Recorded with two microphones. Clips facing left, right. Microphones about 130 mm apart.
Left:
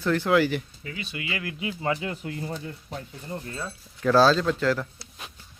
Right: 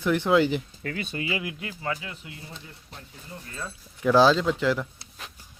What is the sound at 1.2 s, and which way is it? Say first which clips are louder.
Speech: right 3 dB; 25° right (ahead or behind).